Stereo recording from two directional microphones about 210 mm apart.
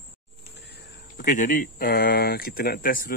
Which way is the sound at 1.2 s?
40° left (ahead or behind).